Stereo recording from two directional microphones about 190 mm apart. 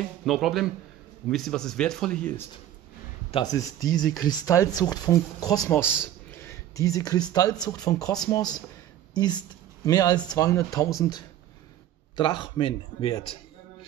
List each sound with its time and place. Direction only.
0.2 s speech: centre (ahead or behind)
3.3 s a woman's voice: 25° left (ahead or behind)
12.2 s speech: 25° left (ahead or behind)